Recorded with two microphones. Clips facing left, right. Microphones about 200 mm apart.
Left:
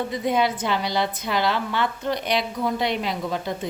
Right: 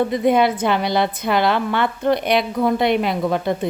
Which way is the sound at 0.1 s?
60° right (ahead or behind).